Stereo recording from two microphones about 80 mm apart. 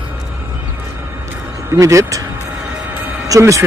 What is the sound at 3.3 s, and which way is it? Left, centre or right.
Speech, right.